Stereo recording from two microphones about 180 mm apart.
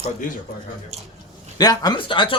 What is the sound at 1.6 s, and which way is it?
Speech, 20° left (ahead or behind).